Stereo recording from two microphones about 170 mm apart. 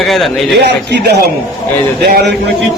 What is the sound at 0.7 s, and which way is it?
Speech, 80° right.